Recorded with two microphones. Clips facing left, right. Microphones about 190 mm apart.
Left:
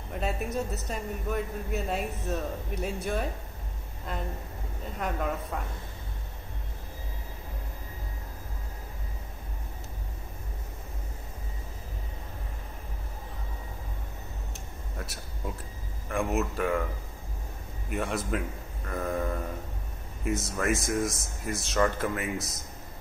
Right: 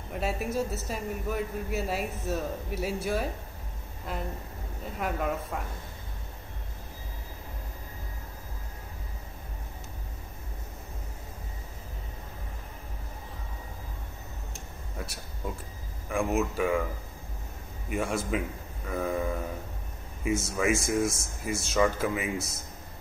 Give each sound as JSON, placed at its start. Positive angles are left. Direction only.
{"t": 0.1, "sound": "a man's voice", "side_deg": -5}
{"t": 15.0, "sound": "a sound", "side_deg": 0}
{"t": 16.1, "sound": "a man's voice", "side_deg": 0}
{"t": 17.8, "sound": "a man's voice", "side_deg": 0}